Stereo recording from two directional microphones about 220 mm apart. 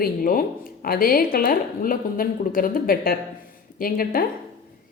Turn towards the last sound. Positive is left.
turn(degrees=40)  # may be behind; listen again after turning